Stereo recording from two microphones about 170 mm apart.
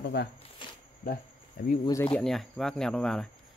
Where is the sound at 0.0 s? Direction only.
85° left.